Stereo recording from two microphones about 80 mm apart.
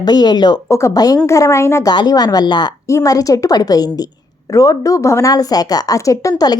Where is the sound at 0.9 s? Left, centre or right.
Left.